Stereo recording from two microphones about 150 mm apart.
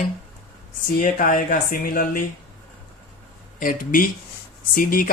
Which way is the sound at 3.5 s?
65° left (ahead or behind).